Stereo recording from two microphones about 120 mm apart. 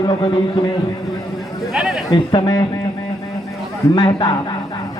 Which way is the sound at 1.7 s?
5° right (ahead or behind).